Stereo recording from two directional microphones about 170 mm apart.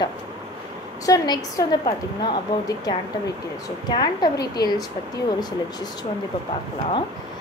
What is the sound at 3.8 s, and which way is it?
Speech, 25° left (ahead or behind).